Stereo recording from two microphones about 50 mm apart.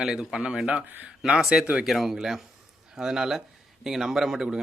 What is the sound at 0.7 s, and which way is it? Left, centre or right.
Speech, right.